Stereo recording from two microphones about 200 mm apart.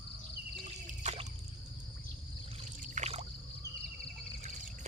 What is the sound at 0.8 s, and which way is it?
Trickle, 35° right (ahead or behind).